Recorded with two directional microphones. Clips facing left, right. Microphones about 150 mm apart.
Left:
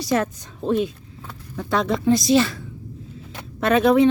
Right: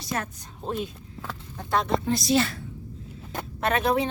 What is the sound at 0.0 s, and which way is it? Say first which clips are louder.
A woman's voice: left 10 dB; 90° left.